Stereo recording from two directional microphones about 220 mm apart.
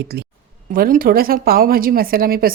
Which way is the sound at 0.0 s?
45° right (ahead or behind).